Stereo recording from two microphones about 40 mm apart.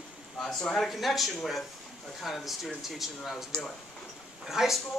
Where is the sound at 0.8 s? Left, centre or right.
Centre.